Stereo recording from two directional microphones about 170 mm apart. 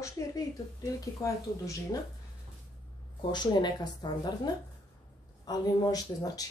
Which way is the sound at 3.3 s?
25° left (ahead or behind).